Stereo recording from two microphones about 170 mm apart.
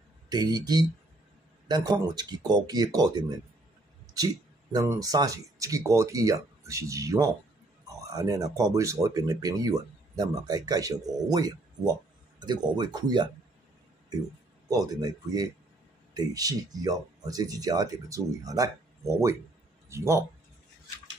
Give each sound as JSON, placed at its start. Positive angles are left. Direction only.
{"t": 0.3, "sound": "speech", "side_deg": -25}
{"t": 4.7, "sound": "speech", "side_deg": -20}
{"t": 14.7, "sound": "speech", "side_deg": -20}